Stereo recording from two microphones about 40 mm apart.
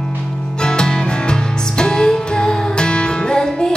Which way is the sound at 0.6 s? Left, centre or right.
Left.